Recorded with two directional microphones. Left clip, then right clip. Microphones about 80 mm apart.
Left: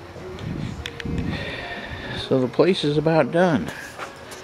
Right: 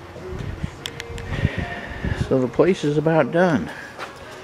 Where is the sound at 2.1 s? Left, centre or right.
Centre.